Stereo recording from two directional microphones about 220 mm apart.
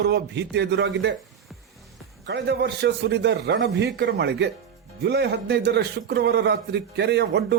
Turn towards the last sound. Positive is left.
turn(degrees=-50)  # may be behind; listen again after turning